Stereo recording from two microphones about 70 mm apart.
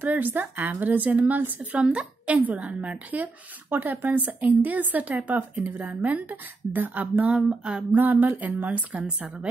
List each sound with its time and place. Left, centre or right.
0.0 s a woman's voice: right
7.4 s female singing: centre
7.9 s a woman's voice: right